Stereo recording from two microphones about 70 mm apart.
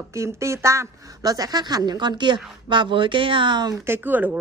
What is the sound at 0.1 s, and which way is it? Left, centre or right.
Speech, right.